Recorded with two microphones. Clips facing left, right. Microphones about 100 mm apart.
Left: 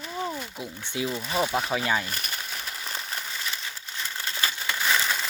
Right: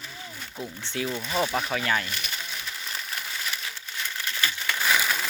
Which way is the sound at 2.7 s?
30° left (ahead or behind).